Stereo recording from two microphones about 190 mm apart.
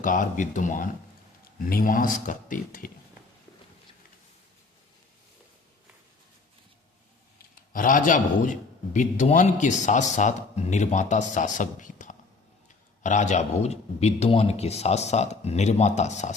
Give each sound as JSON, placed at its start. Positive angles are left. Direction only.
{"t": 0.0, "sound": "speech", "side_deg": 45}
{"t": 7.7, "sound": "a man's voice", "side_deg": 45}